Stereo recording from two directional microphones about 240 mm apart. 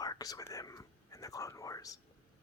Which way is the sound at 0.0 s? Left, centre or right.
Centre.